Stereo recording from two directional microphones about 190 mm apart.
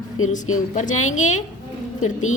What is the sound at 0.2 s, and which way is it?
Speech, 90° left.